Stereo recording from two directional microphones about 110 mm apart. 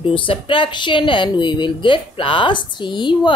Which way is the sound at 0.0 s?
55° left (ahead or behind).